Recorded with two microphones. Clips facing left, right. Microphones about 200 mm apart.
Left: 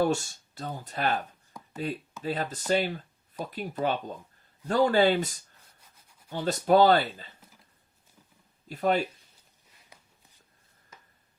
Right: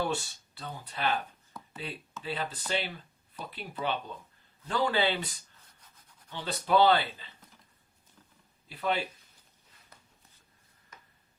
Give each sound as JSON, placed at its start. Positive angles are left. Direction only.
{"t": 0.0, "sound": "speech", "side_deg": 45}
{"t": 8.6, "sound": "speech", "side_deg": 45}